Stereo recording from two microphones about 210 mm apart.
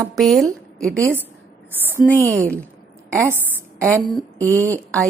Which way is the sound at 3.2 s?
10° right (ahead or behind).